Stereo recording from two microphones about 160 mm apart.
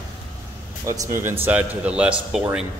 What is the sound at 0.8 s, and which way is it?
A man's voice, 20° right (ahead or behind).